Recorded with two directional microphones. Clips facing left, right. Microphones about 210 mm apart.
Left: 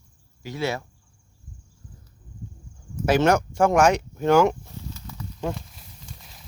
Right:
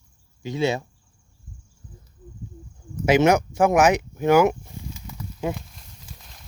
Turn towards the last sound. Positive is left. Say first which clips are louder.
# left 1 dB
turn(degrees=0)  # may be behind; listen again after turning